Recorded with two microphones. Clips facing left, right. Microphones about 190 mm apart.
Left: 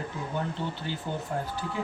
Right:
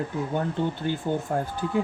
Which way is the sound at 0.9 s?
50° right (ahead or behind).